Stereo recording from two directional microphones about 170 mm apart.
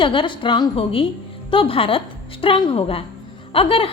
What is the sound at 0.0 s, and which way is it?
A woman's voice, 30° left (ahead or behind).